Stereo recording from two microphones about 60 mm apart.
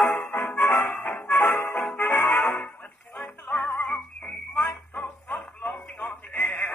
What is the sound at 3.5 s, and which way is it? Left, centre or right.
Music, left.